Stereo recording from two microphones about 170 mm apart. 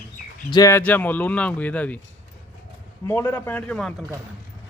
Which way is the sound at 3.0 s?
15° left (ahead or behind).